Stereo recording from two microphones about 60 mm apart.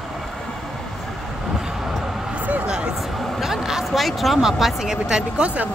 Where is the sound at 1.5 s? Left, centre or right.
Centre.